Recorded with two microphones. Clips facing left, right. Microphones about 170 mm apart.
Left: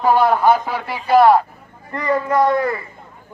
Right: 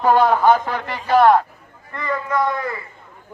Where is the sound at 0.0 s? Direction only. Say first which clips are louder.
Even; 10° left (ahead or behind).